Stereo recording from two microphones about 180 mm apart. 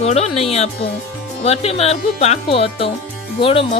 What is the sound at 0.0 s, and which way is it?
A woman's voice, 35° left (ahead or behind).